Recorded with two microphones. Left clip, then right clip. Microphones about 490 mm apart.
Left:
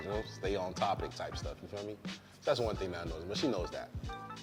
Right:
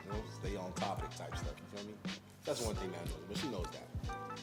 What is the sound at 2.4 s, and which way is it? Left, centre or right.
Speech, left.